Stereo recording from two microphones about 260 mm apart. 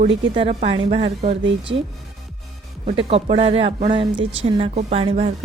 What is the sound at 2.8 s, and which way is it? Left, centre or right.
Speech, right.